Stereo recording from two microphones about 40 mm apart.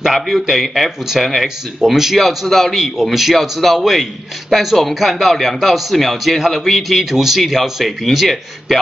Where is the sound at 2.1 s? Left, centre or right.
Centre.